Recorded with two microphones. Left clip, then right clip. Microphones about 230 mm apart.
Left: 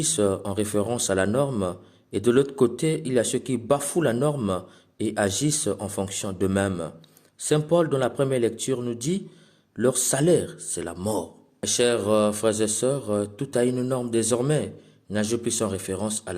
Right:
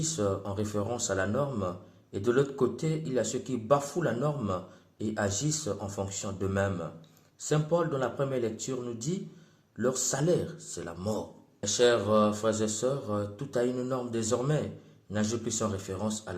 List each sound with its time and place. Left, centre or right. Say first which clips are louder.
0.0 s speech: left 7 dB; left